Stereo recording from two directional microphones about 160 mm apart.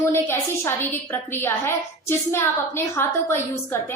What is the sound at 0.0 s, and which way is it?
A woman's voice, 15° left (ahead or behind).